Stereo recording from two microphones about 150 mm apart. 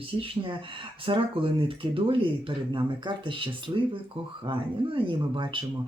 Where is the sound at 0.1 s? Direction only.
35° right (ahead or behind).